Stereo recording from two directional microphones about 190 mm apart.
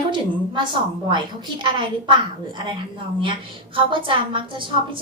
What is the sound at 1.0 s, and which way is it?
A woman's voice, 25° right (ahead or behind).